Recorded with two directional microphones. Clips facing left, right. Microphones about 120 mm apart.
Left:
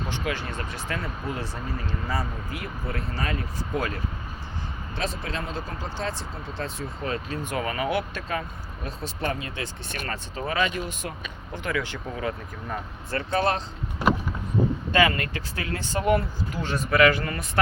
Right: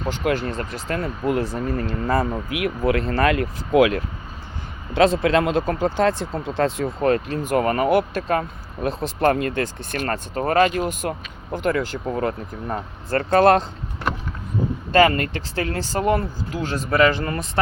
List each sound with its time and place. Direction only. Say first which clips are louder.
0.3 s speech: right 11 dB; 40° right (ahead or behind)
2.5 s speech: right 12 dB; 70° right (ahead or behind)
5.2 s speech: right 14 dB; 75° right (ahead or behind); by 13.7 s 55° right (ahead or behind)
14.9 s speech: right 7 dB; 40° right (ahead or behind)